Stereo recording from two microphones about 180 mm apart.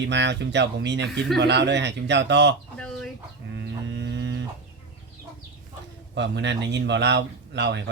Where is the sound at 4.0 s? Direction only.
70° right (ahead or behind).